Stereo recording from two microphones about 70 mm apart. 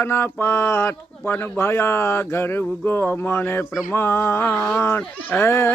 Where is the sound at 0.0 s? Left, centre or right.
Left.